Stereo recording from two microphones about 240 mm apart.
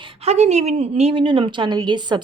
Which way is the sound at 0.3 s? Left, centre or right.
Right.